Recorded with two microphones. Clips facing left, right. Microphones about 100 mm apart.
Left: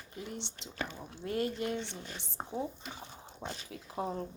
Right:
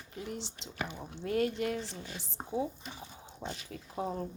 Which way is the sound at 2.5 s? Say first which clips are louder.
Right 4 dB; centre (ahead or behind).